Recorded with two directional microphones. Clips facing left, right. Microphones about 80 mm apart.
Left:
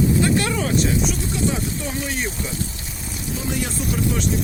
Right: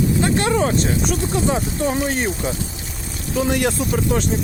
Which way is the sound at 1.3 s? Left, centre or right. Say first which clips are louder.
Right 3 dB; right.